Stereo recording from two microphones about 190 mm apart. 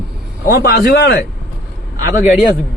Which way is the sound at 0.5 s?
60° left (ahead or behind).